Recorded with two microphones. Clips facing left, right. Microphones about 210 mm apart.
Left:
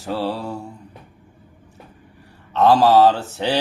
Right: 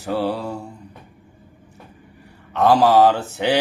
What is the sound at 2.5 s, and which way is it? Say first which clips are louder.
Speech: left 1 dB; 15° right (ahead or behind).